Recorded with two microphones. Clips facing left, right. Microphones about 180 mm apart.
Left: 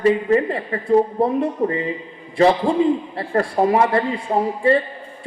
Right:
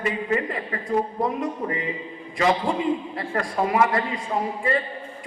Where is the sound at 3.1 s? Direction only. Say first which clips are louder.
Left 6 dB; 30° left (ahead or behind).